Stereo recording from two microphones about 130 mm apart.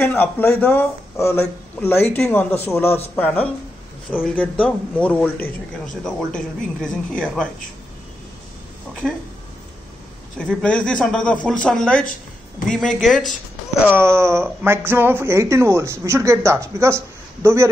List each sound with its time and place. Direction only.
0.0 s a man's voice: 15° left (ahead or behind)
4.4 s a man's voice: 10° left (ahead or behind)
9.0 s speech: centre (ahead or behind)
10.3 s a man's voice: 5° left (ahead or behind)
13.8 s speech: 15° right (ahead or behind)